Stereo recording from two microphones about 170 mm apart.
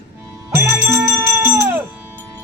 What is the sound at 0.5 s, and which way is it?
Music, 15° right (ahead or behind).